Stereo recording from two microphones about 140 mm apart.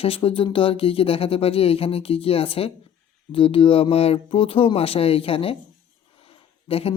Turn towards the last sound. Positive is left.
turn(degrees=45)  # may be behind; listen again after turning